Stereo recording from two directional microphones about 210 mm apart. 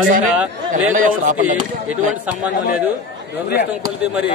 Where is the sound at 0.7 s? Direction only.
40° right (ahead or behind).